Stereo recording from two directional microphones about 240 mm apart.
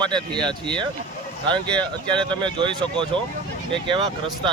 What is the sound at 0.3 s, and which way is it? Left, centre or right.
Speech, centre.